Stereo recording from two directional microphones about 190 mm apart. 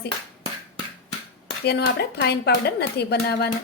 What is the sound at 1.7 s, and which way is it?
Speech, 60° left (ahead or behind).